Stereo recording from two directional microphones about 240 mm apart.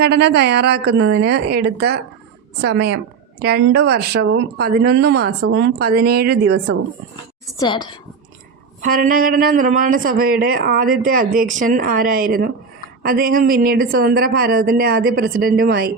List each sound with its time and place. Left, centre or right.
0.0 s a woman's voice: right
4.3 s speech: right
4.6 s speech: right
7.5 s a woman's voice: centre
8.8 s speech: right